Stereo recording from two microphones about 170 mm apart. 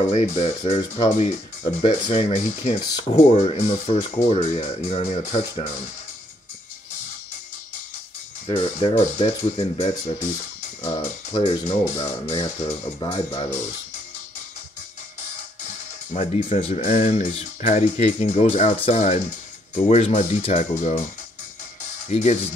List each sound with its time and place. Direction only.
0.1 s speech: 45° left (ahead or behind)
8.5 s speech: 30° left (ahead or behind)
16.1 s speech: 45° left (ahead or behind)
22.1 s speech: 40° left (ahead or behind)